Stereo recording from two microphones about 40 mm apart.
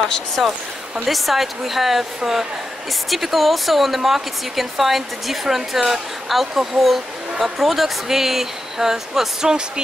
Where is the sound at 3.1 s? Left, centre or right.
Centre.